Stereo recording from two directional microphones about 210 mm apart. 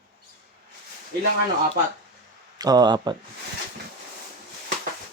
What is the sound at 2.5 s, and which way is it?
Speech, 20° right (ahead or behind).